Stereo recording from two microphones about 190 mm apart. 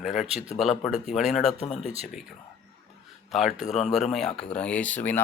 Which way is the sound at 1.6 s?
35° left (ahead or behind).